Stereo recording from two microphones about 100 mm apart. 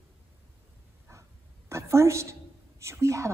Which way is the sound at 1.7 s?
30° right (ahead or behind).